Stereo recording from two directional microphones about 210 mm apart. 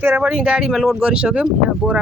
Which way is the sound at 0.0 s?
10° right (ahead or behind).